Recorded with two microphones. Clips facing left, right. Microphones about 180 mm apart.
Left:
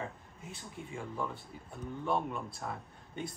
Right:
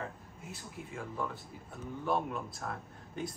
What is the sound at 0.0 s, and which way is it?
Speech, 5° right (ahead or behind).